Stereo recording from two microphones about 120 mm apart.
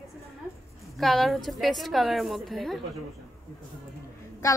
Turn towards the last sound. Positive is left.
turn(degrees=30)  # may be behind; listen again after turning